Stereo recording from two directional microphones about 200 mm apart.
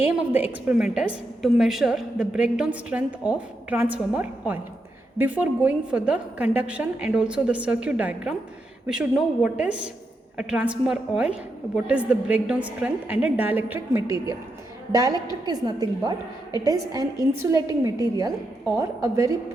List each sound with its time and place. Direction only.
0.0 s a woman's voice: 5° right (ahead or behind)